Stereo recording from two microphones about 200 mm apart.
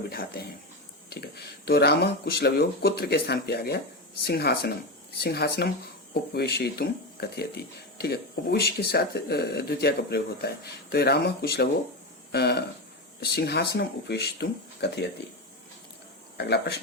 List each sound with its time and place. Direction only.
0.1 s speech: 50° left (ahead or behind)
16.4 s speech: 55° left (ahead or behind)